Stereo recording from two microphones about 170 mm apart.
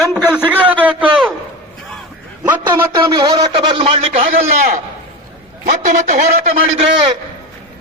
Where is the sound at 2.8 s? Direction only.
20° right (ahead or behind).